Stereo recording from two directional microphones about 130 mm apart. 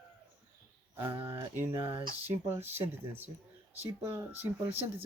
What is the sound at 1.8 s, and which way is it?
Speech, 45° right (ahead or behind).